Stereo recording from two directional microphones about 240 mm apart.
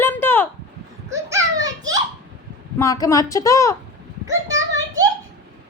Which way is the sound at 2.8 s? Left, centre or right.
Centre.